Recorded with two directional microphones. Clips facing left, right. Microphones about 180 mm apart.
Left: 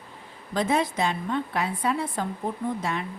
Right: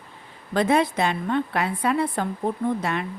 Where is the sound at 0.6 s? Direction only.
65° right (ahead or behind).